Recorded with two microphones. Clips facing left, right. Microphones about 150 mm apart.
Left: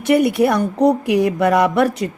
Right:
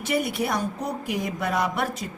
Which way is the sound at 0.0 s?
65° left (ahead or behind).